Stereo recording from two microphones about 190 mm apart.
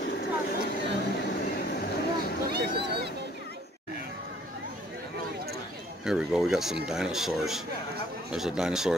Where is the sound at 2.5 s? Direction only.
60° right (ahead or behind).